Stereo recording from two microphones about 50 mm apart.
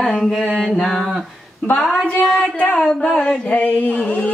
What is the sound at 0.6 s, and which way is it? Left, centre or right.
Mantra, centre.